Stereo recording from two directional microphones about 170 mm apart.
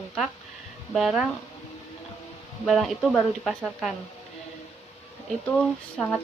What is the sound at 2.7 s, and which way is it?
A woman's voice, centre (ahead or behind).